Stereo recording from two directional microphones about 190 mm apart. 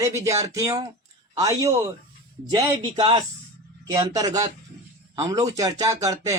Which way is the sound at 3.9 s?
20° right (ahead or behind).